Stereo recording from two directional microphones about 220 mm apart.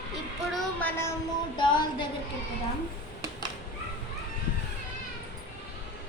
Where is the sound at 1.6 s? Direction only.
20° left (ahead or behind).